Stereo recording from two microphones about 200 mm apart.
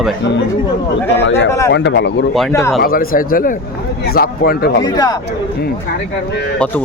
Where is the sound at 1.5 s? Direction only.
15° left (ahead or behind).